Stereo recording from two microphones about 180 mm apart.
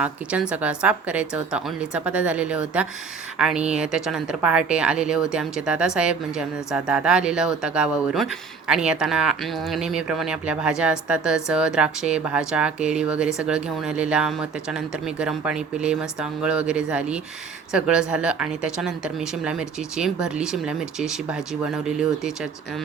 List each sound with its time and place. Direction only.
0.0 s a woman's voice: 5° right (ahead or behind)